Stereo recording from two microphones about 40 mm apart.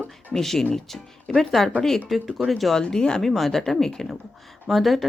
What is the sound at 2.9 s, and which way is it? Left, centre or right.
Speech, centre.